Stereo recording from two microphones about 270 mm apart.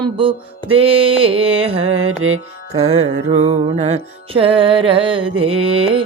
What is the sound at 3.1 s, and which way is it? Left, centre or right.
Music, right.